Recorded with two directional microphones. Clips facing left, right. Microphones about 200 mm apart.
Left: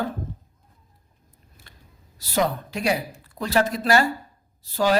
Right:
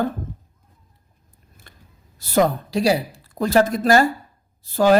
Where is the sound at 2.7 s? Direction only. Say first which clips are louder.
Right 5 dB; 30° right (ahead or behind).